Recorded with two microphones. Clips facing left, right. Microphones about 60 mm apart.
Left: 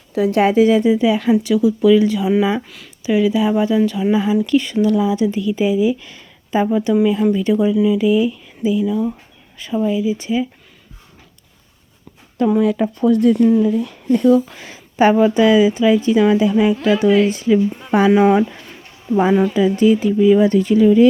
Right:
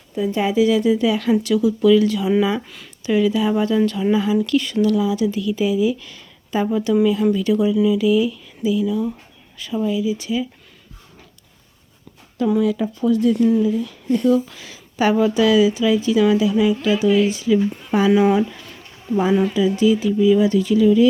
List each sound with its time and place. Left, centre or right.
0.1 s speech: left
0.5 s speech: left; by 2.6 s centre
2.6 s speech: centre
3.0 s a woman's voice: centre; by 10.4 s left
12.4 s a woman's voice: left
17.3 s a woman's voice: left